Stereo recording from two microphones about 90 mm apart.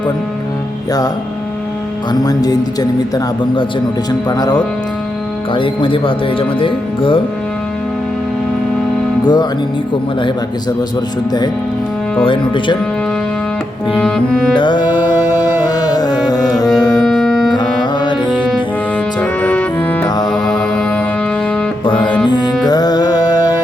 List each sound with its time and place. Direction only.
2.2 s speech: 45° left (ahead or behind)
4.3 s speech: 50° left (ahead or behind)
5.5 s speech: 75° left (ahead or behind)
9.2 s speech: 50° left (ahead or behind)
12.2 s speech: 65° left (ahead or behind)
14.0 s music: 5° left (ahead or behind)
14.5 s music: 60° left (ahead or behind); by 16.5 s 45° left (ahead or behind)
16.9 s music: 5° left (ahead or behind)
19.2 s music: 15° left (ahead or behind)
20.1 s music: 50° left (ahead or behind)
20.3 s music: 5° left (ahead or behind)
21.8 s music: 70° left (ahead or behind)
22.3 s music: 50° left (ahead or behind)